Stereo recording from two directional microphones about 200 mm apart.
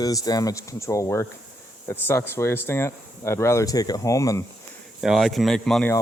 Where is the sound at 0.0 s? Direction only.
20° left (ahead or behind).